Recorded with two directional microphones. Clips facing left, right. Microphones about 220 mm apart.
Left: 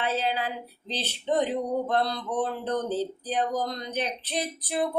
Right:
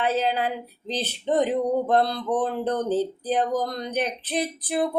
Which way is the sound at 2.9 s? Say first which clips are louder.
Right 5 dB; 50° right (ahead or behind).